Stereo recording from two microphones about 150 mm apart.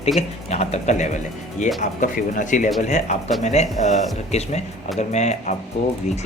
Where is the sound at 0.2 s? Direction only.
45° left (ahead or behind).